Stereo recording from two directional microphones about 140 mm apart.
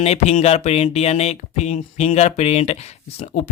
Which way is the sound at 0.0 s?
50° left (ahead or behind).